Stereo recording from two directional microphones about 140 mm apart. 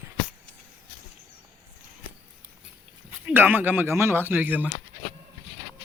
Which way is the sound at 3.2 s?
15° right (ahead or behind).